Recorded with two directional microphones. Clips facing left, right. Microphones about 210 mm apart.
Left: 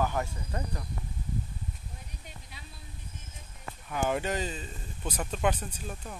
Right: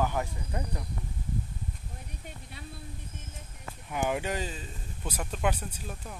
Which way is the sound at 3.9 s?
15° right (ahead or behind).